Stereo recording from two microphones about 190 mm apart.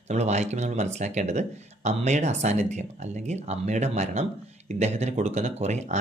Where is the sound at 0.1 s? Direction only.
35° right (ahead or behind).